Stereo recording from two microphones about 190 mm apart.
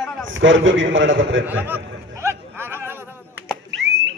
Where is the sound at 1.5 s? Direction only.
10° right (ahead or behind).